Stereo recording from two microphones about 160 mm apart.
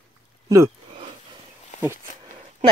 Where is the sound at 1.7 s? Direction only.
50° left (ahead or behind).